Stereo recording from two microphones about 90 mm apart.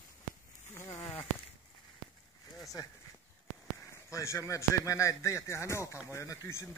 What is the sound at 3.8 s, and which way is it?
A man's voice, 35° left (ahead or behind).